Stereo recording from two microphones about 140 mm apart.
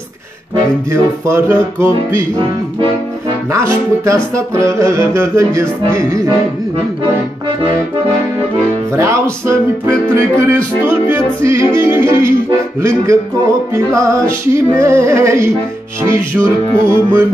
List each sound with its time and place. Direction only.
1.2 s music: 15° right (ahead or behind)
3.5 s music: 20° right (ahead or behind)
8.9 s music: 20° right (ahead or behind)